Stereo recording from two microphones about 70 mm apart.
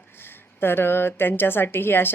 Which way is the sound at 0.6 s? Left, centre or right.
Left.